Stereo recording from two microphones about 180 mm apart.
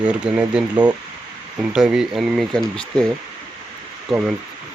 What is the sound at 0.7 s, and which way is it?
Speech, 25° right (ahead or behind).